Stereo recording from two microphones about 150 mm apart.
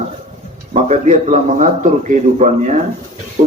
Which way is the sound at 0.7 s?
50° right (ahead or behind).